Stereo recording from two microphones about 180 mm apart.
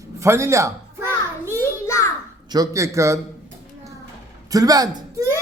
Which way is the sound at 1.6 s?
15° left (ahead or behind).